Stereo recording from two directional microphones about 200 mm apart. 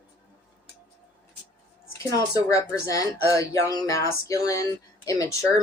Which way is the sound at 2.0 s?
15° left (ahead or behind).